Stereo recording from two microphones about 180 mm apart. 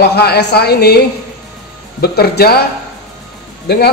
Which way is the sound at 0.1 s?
65° left (ahead or behind).